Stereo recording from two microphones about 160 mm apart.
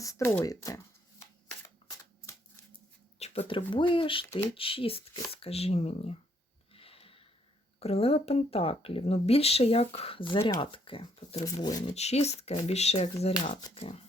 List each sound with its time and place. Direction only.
0.0 s speech: 20° left (ahead or behind)
3.2 s speech: 40° left (ahead or behind)
6.7 s a sound: 35° left (ahead or behind)
7.8 s speech: 40° left (ahead or behind)
11.4 s speech: 20° left (ahead or behind)
11.9 s speech: 40° left (ahead or behind)